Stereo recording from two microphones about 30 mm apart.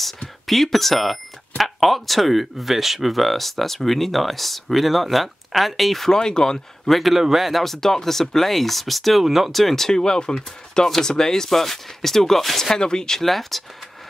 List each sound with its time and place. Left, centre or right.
0.5 s speech: centre
6.1 s speech: left
6.9 s speech: centre
7.6 s speech: centre
9.5 s speech: centre
9.8 s speech: left
11.5 s speech: centre
12.6 s speech: left
13.2 s speech: centre